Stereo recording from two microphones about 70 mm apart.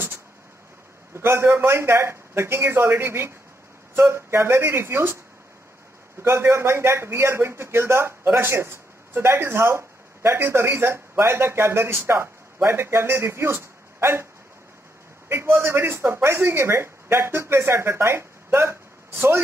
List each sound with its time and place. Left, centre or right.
1.1 s speech: right
6.2 s speech: right
15.2 s speech: right